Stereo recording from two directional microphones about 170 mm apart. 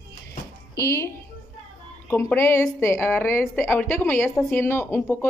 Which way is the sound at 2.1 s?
10° left (ahead or behind).